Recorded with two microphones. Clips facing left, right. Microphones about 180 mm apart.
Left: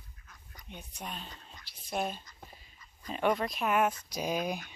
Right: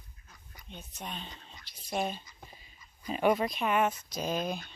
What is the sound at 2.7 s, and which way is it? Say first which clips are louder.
Speech: right 4 dB; 10° right (ahead or behind).